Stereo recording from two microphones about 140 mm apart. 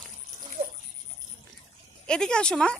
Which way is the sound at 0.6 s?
75° right (ahead or behind).